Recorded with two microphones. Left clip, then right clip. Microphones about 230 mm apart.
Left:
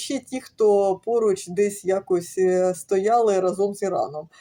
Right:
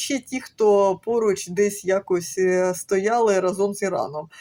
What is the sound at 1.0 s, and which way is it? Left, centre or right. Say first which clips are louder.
Speech: even; centre.